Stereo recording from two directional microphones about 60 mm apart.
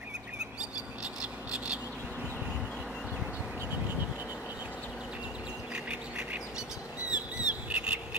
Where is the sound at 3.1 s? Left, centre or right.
Centre.